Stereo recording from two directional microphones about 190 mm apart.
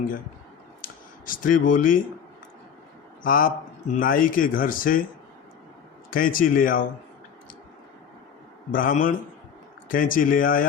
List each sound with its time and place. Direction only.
0.8 s a sound: 45° left (ahead or behind)
3.2 s speech: 45° left (ahead or behind)
6.1 s speech: 45° left (ahead or behind)
8.7 s speech: 45° left (ahead or behind)